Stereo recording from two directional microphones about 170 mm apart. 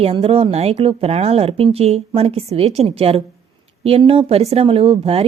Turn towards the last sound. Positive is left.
turn(degrees=-35)  # may be behind; listen again after turning